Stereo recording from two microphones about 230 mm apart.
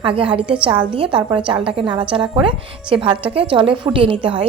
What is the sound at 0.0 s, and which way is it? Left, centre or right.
Speech, right.